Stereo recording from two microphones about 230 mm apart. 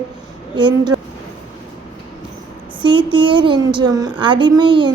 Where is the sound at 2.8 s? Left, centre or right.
Right.